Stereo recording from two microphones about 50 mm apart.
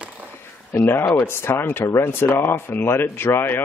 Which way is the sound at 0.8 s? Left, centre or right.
Left.